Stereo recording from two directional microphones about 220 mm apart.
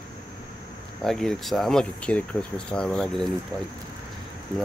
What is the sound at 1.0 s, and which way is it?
Speech, centre (ahead or behind).